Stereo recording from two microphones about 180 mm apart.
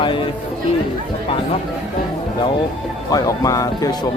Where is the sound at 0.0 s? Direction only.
25° left (ahead or behind).